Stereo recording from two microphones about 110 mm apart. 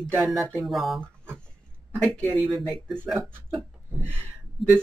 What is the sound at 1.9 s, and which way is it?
Speech, 10° left (ahead or behind).